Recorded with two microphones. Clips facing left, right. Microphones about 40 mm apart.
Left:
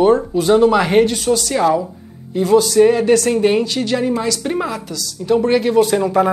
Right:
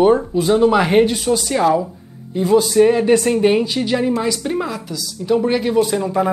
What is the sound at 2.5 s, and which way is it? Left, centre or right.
Speech, centre.